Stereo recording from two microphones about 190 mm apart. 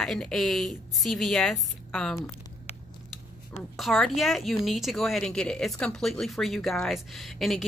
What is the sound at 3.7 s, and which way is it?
Speech, centre (ahead or behind).